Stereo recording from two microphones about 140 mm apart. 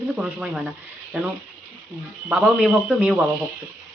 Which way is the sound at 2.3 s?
5° right (ahead or behind).